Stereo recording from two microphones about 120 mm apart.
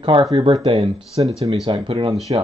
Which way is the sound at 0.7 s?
50° right (ahead or behind).